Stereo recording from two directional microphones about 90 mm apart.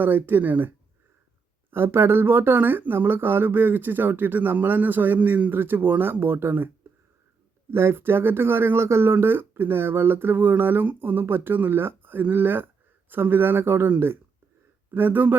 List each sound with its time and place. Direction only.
0.0 s speech: 20° right (ahead or behind)
1.7 s speech: 25° right (ahead or behind)
7.7 s speech: 25° right (ahead or behind)